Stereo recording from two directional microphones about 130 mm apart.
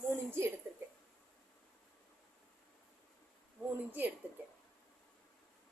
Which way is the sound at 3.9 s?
15° right (ahead or behind).